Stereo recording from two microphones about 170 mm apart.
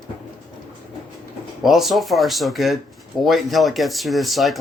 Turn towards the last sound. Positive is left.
turn(degrees=0)  # may be behind; listen again after turning